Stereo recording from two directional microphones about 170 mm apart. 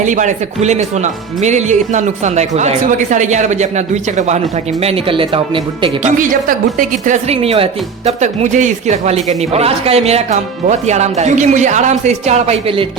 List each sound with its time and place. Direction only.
0.0 s speech: 45° right (ahead or behind)
6.0 s speech: 50° right (ahead or behind); by 12.9 s 35° right (ahead or behind)